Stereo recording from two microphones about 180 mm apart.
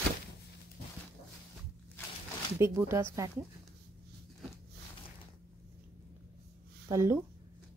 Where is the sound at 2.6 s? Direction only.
15° right (ahead or behind).